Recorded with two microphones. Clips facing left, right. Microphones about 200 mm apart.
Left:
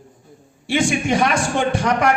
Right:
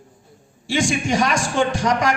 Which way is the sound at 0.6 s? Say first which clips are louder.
Left 2 dB; 60° left (ahead or behind).